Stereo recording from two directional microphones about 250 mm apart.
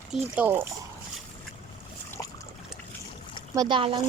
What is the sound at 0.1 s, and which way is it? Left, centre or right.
Speech, centre.